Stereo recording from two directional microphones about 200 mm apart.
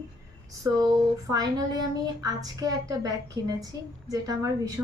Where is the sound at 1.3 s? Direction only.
20° right (ahead or behind).